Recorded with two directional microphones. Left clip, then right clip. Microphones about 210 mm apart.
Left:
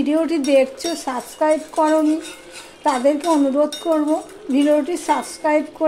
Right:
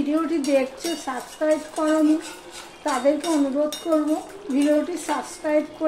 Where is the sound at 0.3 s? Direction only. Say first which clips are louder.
Left 6 dB; 45° left (ahead or behind).